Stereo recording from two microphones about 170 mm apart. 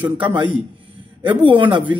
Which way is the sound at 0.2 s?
30° right (ahead or behind).